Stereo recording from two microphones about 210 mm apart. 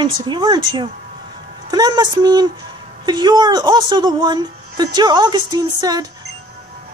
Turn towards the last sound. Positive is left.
turn(degrees=-15)  # may be behind; listen again after turning